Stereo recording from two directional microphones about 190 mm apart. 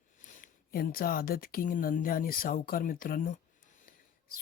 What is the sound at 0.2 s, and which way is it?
Speech, 45° left (ahead or behind).